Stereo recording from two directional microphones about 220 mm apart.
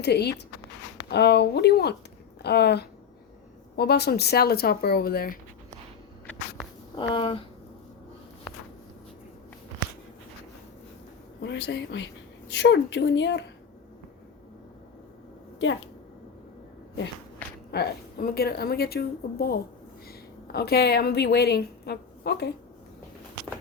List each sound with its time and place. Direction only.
0.0 s a woman's voice: 50° left (ahead or behind)
7.1 s speech: 25° left (ahead or behind)
11.4 s a woman's voice: 55° left (ahead or behind)
17.7 s a woman's voice: 45° left (ahead or behind)